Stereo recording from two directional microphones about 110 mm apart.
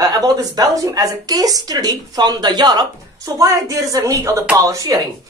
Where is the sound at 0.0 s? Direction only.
35° right (ahead or behind).